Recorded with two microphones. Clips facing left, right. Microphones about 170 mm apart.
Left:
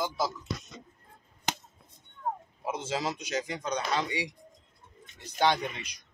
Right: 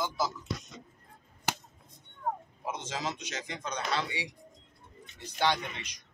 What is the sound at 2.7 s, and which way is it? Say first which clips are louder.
Speech: left 4 dB; 10° left (ahead or behind).